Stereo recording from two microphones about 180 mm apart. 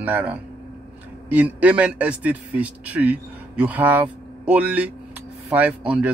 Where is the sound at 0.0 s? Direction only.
10° right (ahead or behind).